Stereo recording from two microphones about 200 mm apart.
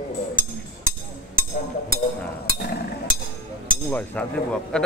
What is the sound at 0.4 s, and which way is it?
Music, 45° right (ahead or behind).